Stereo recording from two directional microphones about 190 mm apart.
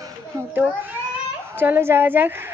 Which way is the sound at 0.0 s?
10° right (ahead or behind).